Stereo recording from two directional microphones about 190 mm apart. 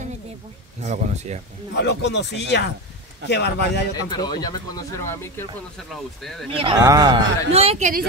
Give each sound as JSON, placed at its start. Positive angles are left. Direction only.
{"t": 0.8, "sound": "speech", "side_deg": -35}
{"t": 1.8, "sound": "speech", "side_deg": 65}
{"t": 3.9, "sound": "speech", "side_deg": 20}
{"t": 5.8, "sound": "speech", "side_deg": 0}
{"t": 6.5, "sound": "speech", "side_deg": -25}
{"t": 7.5, "sound": "speech", "side_deg": -30}